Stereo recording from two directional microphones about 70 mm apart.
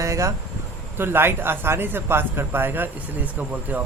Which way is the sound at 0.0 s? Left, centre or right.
Right.